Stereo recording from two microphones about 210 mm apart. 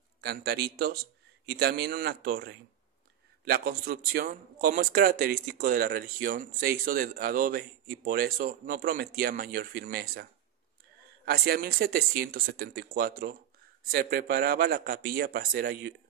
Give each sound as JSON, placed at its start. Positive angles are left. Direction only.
{"t": 0.2, "sound": "speech", "side_deg": -50}
{"t": 11.2, "sound": "speech", "side_deg": -50}